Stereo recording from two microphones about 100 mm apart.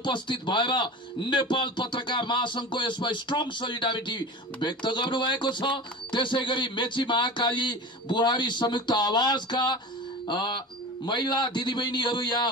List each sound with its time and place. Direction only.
0.0 s a man's voice: 50° left (ahead or behind)